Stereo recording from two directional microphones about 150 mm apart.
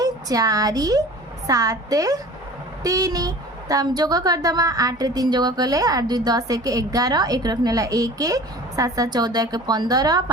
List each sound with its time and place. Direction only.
0.0 s speech: 25° right (ahead or behind)